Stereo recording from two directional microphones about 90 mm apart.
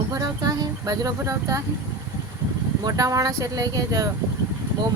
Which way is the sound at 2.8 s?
40° right (ahead or behind).